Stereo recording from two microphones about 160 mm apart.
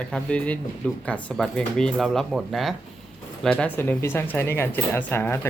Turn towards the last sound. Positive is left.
turn(degrees=15)  # may be behind; listen again after turning